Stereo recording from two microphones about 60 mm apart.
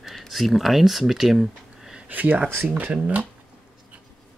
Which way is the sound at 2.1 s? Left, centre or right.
Right.